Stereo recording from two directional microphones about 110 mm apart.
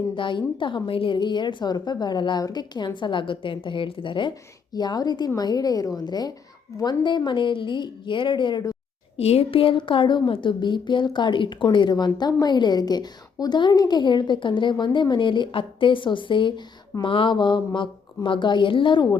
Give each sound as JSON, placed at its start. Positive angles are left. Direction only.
{"t": 0.1, "sound": "speech", "side_deg": 50}
{"t": 9.1, "sound": "speech", "side_deg": 70}